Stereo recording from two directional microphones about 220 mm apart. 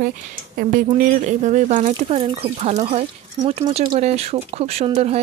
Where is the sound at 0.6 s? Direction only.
35° right (ahead or behind).